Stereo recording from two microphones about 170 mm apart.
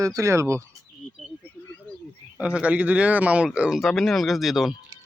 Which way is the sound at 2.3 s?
5° right (ahead or behind).